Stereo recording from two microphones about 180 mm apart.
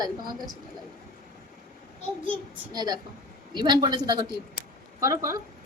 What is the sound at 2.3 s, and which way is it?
A woman's voice, 20° right (ahead or behind).